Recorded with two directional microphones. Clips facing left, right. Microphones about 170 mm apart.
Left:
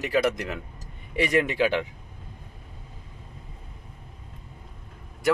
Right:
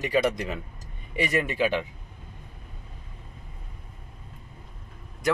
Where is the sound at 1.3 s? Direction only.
15° left (ahead or behind).